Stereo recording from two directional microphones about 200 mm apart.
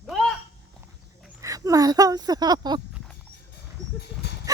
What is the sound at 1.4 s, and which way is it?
Speech, 15° right (ahead or behind).